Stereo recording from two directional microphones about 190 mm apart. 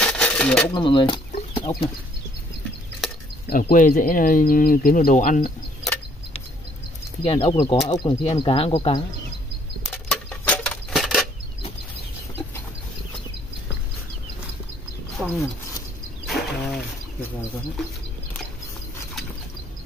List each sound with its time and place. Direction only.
0.0 s coin: 5° left (ahead or behind)
0.7 s speech: 25° left (ahead or behind)
1.3 s chicken: 25° left (ahead or behind)
3.4 s speech: 50° left (ahead or behind)
7.2 s speech: 30° left (ahead or behind)
9.8 s a sound: 5° left (ahead or behind)
15.2 s a sound: centre (ahead or behind)